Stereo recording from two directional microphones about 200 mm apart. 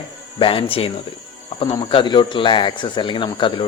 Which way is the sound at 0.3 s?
25° left (ahead or behind).